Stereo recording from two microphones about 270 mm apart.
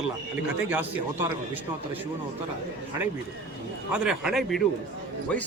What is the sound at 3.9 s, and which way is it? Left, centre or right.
Speech, centre.